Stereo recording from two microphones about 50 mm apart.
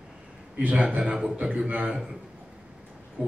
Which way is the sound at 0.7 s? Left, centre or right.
Right.